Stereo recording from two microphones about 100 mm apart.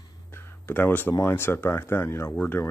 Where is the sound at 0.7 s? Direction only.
20° left (ahead or behind).